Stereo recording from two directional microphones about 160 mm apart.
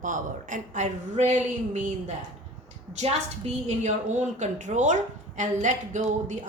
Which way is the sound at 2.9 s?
45° right (ahead or behind).